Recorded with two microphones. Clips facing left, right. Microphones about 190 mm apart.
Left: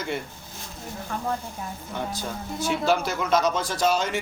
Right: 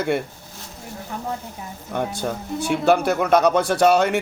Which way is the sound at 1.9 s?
60° right (ahead or behind).